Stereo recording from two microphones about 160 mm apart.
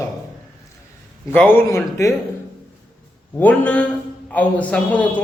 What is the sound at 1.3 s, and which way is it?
Speech, 10° left (ahead or behind).